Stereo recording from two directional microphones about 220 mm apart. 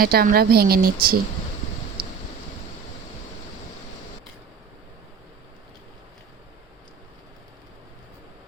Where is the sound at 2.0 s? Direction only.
40° right (ahead or behind).